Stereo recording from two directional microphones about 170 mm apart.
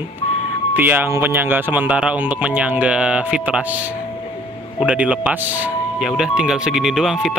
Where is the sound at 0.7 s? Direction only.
10° right (ahead or behind).